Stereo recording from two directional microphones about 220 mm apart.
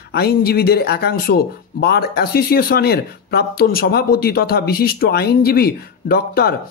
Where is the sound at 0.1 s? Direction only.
45° left (ahead or behind).